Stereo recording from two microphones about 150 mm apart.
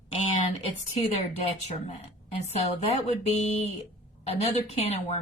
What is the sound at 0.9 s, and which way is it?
Speech, 45° left (ahead or behind).